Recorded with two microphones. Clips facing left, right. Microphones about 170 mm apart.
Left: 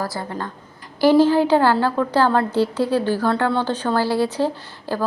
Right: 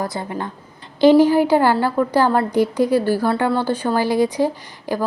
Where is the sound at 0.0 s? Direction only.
20° right (ahead or behind).